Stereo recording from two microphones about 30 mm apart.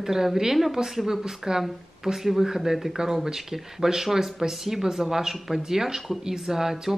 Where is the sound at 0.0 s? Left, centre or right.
Centre.